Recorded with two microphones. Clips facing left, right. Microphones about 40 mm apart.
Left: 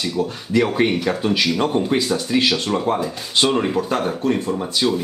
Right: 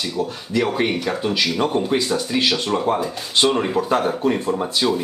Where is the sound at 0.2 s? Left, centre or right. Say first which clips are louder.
Left 2 dB; centre.